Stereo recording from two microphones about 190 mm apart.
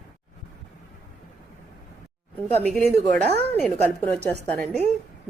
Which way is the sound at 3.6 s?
10° left (ahead or behind).